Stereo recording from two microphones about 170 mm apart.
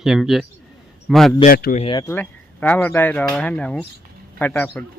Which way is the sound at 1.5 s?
70° left (ahead or behind).